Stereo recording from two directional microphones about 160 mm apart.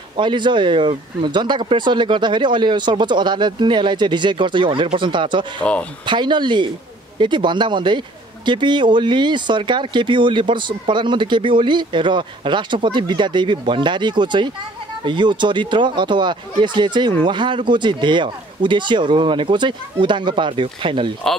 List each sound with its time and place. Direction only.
0.2 s speech: 30° right (ahead or behind)